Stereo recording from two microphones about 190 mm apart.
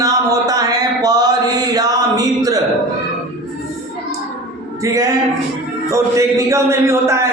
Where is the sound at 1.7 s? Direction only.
20° right (ahead or behind).